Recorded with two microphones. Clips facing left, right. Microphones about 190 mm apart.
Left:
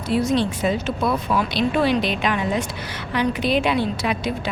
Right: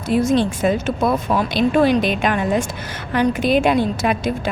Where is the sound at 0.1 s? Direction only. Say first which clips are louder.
Right 3 dB; 50° right (ahead or behind).